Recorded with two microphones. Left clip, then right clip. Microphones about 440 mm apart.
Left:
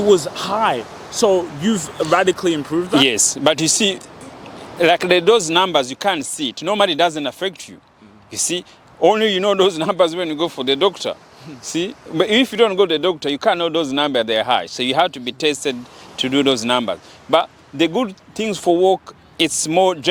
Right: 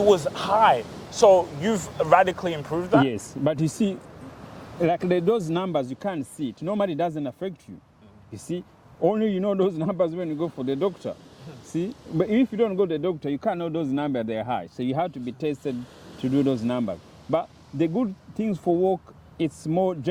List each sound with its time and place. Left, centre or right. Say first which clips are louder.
0.1 s speech: left 4 dB; right
3.1 s speech: left 10 dB; centre
18.6 s speech: left 8 dB; centre
19.5 s speech: left 9 dB; centre